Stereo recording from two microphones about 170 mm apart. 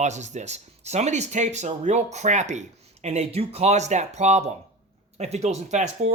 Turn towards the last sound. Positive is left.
turn(degrees=-45)  # may be behind; listen again after turning